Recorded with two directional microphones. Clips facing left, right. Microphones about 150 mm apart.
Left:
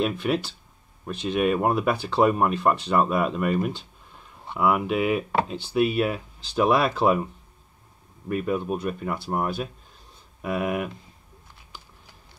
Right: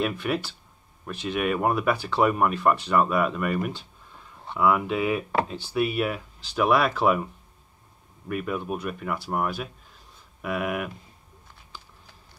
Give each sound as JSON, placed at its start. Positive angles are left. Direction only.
{"t": 0.0, "sound": "speech", "side_deg": 20}
{"t": 8.3, "sound": "speech", "side_deg": 30}